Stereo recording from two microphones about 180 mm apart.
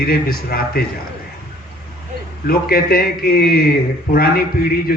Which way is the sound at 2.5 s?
55° left (ahead or behind).